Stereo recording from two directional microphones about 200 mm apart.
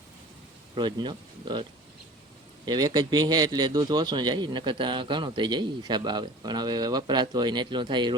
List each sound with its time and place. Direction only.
0.8 s a man's voice: 20° right (ahead or behind)
2.6 s a man's voice: 20° right (ahead or behind)